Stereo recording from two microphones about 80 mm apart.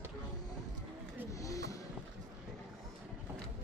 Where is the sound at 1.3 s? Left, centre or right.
Left.